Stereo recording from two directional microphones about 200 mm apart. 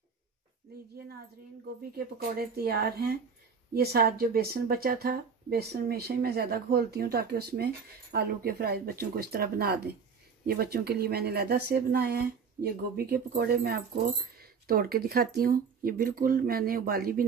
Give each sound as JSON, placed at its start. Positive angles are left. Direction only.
{"t": 1.8, "sound": "speech", "side_deg": -50}